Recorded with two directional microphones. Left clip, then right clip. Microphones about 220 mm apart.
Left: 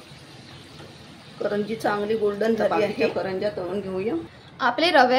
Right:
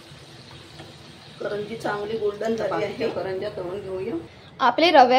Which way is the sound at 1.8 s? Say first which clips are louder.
Left 3 dB; 45° left (ahead or behind).